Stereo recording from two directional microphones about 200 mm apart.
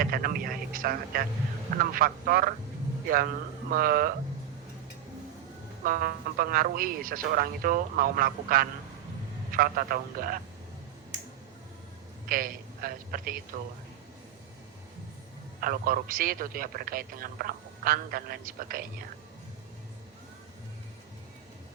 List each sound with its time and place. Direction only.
0.0 s a man's voice: 45° right (ahead or behind)
3.7 s a man's voice: 50° right (ahead or behind)
5.8 s a man's voice: 45° right (ahead or behind)
12.3 s a man's voice: 45° right (ahead or behind)
15.6 s a man's voice: 45° right (ahead or behind)